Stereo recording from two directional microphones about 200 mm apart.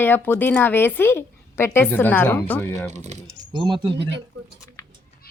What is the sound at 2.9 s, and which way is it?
Speech, 35° right (ahead or behind).